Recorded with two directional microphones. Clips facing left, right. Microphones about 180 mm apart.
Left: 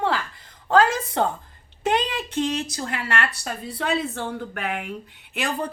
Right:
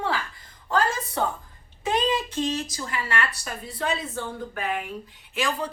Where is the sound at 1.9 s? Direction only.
65° left (ahead or behind).